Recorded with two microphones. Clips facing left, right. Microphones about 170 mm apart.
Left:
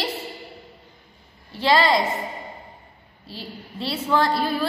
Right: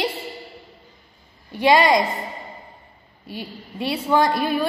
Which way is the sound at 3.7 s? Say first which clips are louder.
Right 3 dB; 15° right (ahead or behind).